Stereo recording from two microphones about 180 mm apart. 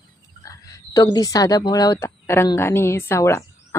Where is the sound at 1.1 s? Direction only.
20° left (ahead or behind).